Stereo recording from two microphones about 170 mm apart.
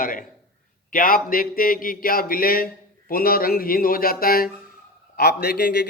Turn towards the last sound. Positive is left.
turn(degrees=75)  # may be behind; listen again after turning